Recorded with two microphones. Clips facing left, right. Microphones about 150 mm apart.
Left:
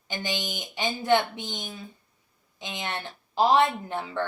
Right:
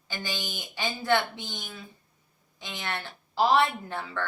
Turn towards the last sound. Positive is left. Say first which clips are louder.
# left 4 dB
turn(degrees=15)  # may be behind; listen again after turning